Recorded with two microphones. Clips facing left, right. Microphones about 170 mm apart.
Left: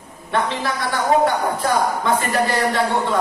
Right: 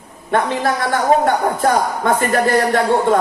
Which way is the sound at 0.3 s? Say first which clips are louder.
Right 5 dB; 50° right (ahead or behind).